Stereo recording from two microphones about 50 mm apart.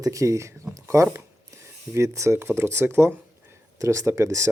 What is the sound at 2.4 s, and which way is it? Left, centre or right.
Speech, right.